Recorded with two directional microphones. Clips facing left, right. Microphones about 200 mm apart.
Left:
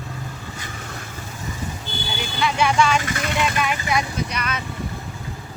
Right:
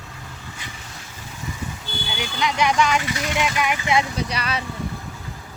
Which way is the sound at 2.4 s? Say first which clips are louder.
Left 1 dB; 15° right (ahead or behind).